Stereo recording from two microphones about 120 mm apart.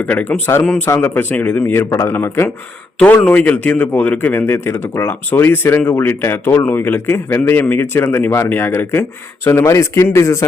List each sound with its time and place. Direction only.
0.0 s a man's voice: 10° left (ahead or behind)